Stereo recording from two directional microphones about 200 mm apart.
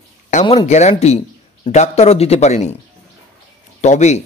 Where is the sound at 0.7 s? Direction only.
35° left (ahead or behind).